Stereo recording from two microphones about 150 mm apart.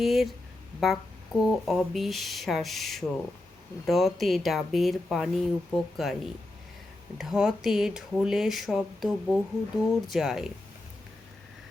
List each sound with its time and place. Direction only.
0.0 s speech: centre (ahead or behind)
7.2 s speech: 5° right (ahead or behind)